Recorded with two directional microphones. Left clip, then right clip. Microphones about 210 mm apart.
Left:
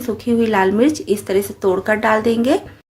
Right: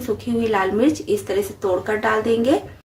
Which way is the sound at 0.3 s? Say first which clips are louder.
Left 4 dB; 40° left (ahead or behind).